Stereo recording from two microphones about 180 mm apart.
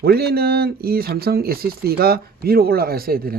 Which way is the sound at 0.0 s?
60° right (ahead or behind).